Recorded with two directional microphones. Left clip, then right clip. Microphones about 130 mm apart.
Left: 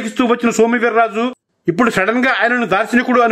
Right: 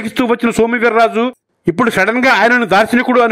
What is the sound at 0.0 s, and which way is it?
A man's voice, 40° right (ahead or behind).